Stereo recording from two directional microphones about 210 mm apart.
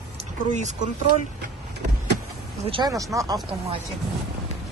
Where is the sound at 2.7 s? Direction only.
20° right (ahead or behind).